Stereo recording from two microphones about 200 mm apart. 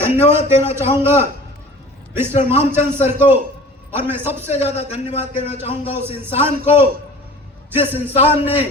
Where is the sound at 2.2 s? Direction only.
35° left (ahead or behind).